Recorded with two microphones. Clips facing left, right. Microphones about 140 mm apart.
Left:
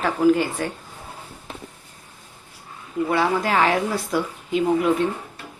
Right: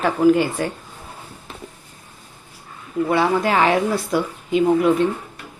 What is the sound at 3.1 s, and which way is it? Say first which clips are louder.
Speech: right 3 dB; centre (ahead or behind).